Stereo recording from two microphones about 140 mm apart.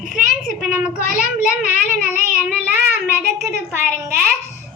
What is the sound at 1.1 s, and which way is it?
Child singing, 60° left (ahead or behind).